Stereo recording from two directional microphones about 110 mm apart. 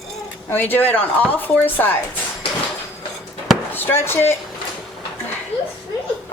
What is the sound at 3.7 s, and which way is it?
Speech, 20° left (ahead or behind).